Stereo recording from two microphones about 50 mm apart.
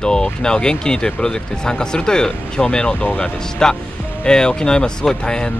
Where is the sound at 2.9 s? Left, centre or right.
Left.